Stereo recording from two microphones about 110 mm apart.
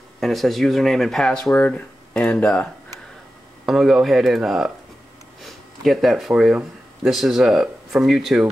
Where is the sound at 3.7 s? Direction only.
Centre (ahead or behind).